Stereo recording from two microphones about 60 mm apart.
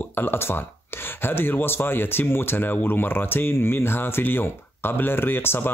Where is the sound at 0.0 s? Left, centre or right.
Left.